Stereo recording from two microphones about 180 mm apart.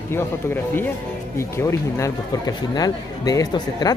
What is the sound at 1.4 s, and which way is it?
Speech, 15° left (ahead or behind).